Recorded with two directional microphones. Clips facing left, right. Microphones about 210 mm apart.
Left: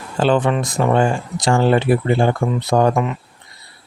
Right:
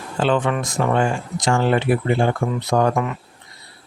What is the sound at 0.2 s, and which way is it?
Speech, 35° left (ahead or behind).